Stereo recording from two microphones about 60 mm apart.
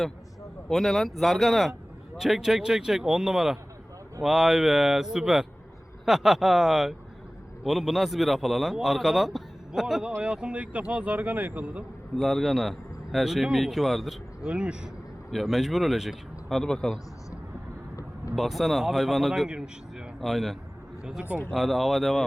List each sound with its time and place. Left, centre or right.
0.7 s a man's voice: centre
10.2 s speech: centre
12.1 s a man's voice: centre
14.4 s speech: centre
15.3 s a man's voice: centre
18.3 s a man's voice: centre
19.5 s speech: centre
20.2 s a man's voice: centre